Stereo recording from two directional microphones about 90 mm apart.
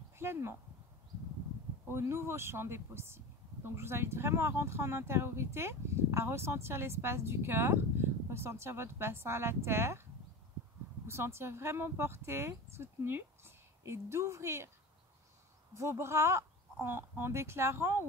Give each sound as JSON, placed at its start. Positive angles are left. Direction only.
{"t": 0.2, "sound": "speech", "side_deg": -30}
{"t": 1.9, "sound": "speech", "side_deg": -30}
{"t": 11.1, "sound": "speech", "side_deg": -30}
{"t": 15.7, "sound": "speech", "side_deg": -30}